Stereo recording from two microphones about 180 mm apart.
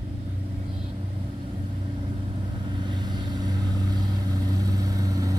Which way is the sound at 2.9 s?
25° right (ahead or behind).